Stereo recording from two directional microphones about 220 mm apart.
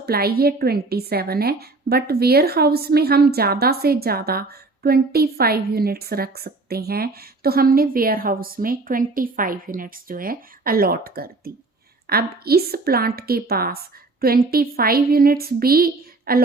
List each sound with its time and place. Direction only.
0.0 s a woman's voice: 45° right (ahead or behind)